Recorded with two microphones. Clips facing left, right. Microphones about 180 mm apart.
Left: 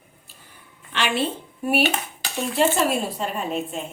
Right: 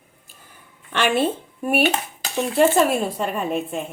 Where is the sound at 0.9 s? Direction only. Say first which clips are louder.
Right 4 dB; 50° right (ahead or behind).